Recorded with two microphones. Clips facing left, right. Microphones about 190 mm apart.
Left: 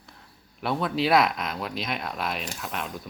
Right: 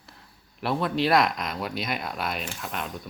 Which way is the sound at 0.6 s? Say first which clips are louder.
Right 1 dB; centre (ahead or behind).